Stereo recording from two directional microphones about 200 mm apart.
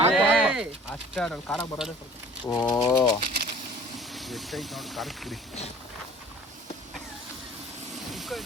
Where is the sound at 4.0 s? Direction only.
Centre (ahead or behind).